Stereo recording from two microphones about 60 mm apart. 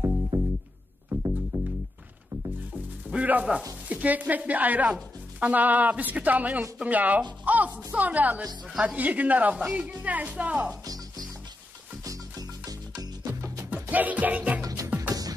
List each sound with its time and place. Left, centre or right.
0.3 s music: right
1.1 s music: right
1.5 s music: right
3.1 s a woman's voice: right
9.6 s a woman's voice: centre
10.7 s music: right
12.0 s music: right
13.7 s music: right
14.6 s music: right